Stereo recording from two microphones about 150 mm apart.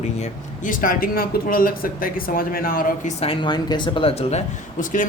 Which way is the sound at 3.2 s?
35° left (ahead or behind).